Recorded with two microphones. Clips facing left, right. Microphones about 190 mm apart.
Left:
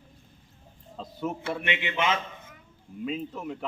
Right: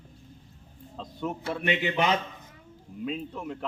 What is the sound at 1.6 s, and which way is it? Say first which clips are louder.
Speech: right 4 dB; 40° right (ahead or behind).